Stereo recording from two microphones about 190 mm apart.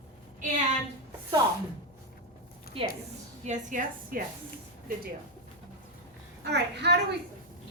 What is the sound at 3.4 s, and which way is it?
Speech, 45° right (ahead or behind).